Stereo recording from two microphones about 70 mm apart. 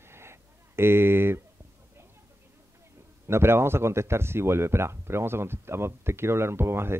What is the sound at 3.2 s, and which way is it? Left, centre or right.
Speech, right.